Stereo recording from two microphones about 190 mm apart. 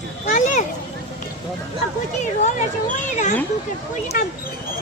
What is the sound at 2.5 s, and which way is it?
Speech, 40° left (ahead or behind).